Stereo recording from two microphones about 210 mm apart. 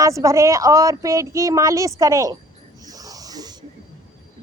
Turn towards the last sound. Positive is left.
turn(degrees=-20)  # may be behind; listen again after turning